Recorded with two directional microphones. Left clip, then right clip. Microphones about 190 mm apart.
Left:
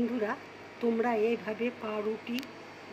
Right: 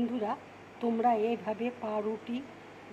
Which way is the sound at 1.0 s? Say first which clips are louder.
Right 4 dB; 30° right (ahead or behind).